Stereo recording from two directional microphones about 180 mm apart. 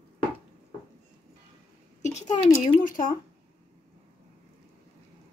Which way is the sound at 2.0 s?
40° left (ahead or behind).